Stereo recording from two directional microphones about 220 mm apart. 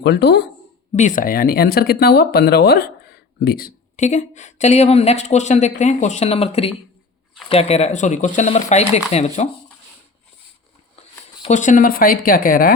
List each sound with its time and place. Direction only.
0.0 s speech: 50° left (ahead or behind)
0.9 s speech: 35° left (ahead or behind)
11.4 s speech: 35° left (ahead or behind)